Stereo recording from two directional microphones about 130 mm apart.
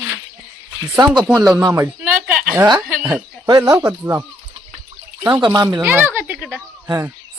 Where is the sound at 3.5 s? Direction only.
30° right (ahead or behind).